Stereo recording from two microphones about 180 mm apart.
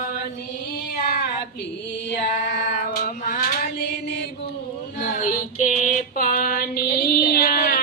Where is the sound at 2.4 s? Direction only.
55° left (ahead or behind).